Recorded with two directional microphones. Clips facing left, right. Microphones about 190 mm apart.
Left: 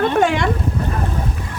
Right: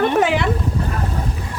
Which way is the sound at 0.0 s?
5° right (ahead or behind).